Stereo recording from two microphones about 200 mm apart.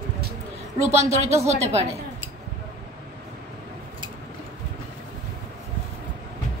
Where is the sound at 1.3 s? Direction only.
35° right (ahead or behind).